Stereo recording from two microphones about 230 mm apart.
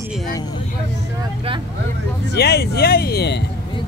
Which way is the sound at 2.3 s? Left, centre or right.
Left.